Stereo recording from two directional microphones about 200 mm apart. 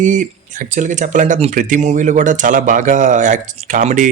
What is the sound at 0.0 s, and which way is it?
Speech, 40° right (ahead or behind).